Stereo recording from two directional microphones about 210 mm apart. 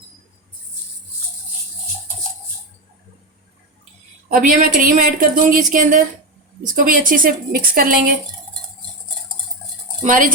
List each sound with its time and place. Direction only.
4.3 s a woman's voice: 40° right (ahead or behind)
10.0 s a woman's voice: 40° right (ahead or behind)